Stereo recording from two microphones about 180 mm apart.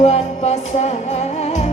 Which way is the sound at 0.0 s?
35° left (ahead or behind).